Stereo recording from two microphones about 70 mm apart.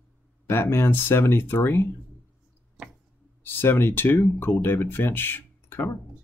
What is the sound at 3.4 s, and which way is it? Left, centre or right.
Speech, left.